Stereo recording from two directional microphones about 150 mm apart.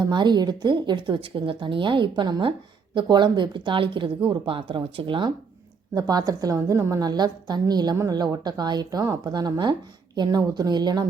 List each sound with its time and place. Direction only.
0.0 s a woman's voice: 30° right (ahead or behind)